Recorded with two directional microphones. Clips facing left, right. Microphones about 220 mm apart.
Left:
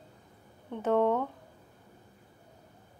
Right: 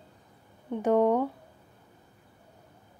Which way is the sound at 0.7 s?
15° right (ahead or behind).